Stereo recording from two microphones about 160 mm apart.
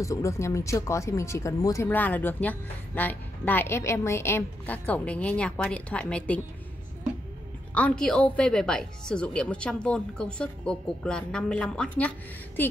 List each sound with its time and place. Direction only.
0.0 s speech: 20° left (ahead or behind)
7.7 s speech: 5° left (ahead or behind)